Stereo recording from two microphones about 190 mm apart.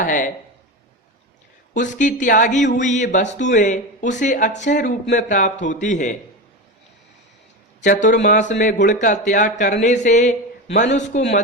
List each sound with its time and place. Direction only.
0.0 s speech: 45° left (ahead or behind)
1.7 s speech: 40° left (ahead or behind)
7.9 s speech: 40° left (ahead or behind)